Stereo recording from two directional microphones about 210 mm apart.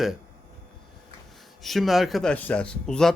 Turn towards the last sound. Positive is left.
turn(degrees=5)  # may be behind; listen again after turning